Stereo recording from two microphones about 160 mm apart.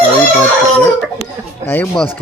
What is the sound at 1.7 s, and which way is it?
Speech, 10° left (ahead or behind).